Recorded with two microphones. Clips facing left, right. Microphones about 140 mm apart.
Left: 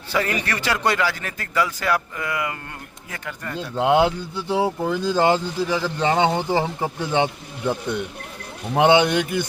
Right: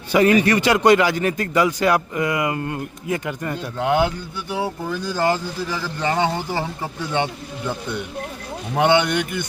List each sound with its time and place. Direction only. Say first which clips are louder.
0.1 s speech: right 9 dB; 15° right (ahead or behind)
3.8 s speech: left 2 dB; 25° left (ahead or behind)
8.7 s speech: left 2 dB; 20° left (ahead or behind)